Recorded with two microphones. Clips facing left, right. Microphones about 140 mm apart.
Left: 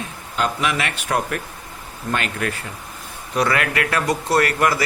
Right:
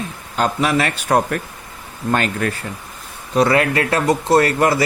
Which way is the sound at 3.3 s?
25° right (ahead or behind).